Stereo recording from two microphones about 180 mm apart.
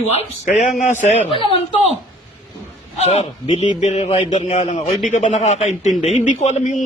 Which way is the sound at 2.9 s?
35° left (ahead or behind).